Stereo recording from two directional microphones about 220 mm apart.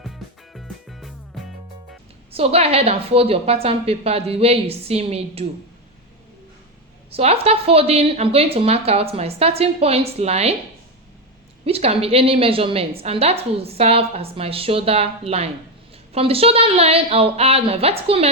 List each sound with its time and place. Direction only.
0.0 s music: centre (ahead or behind)
2.3 s a woman's voice: 25° right (ahead or behind)
7.1 s a woman's voice: 25° right (ahead or behind)
11.6 s a woman's voice: 25° right (ahead or behind)